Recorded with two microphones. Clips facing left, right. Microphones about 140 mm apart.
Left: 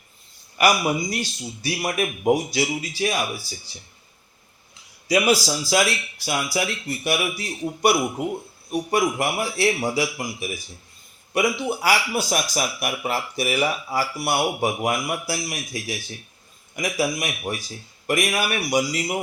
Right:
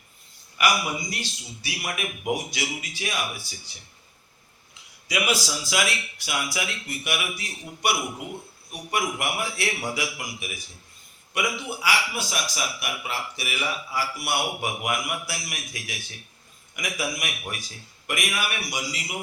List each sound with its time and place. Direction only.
0.6 s a man's voice: 40° left (ahead or behind)